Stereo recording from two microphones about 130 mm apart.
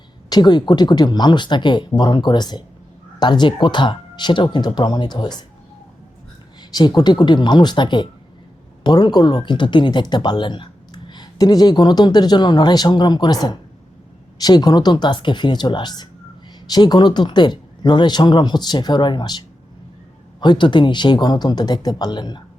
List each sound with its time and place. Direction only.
0.3 s speech: 35° left (ahead or behind)
6.6 s speech: 35° left (ahead or behind)